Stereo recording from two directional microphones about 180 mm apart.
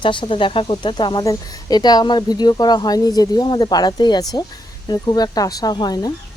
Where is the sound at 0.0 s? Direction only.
25° left (ahead or behind).